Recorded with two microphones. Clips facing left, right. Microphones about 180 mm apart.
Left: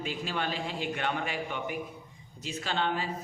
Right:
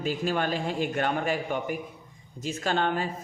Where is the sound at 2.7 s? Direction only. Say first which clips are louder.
Right 4 dB; 50° right (ahead or behind).